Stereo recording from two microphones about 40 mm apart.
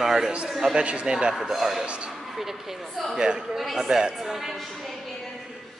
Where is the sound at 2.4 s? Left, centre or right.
Centre.